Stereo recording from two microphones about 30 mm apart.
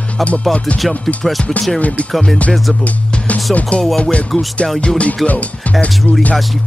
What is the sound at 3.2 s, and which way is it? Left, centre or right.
Speech, left.